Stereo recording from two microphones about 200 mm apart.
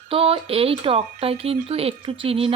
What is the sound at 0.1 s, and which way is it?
Speech, 25° right (ahead or behind).